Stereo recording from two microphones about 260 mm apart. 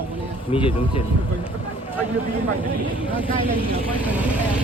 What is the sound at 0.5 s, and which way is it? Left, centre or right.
Speech, centre.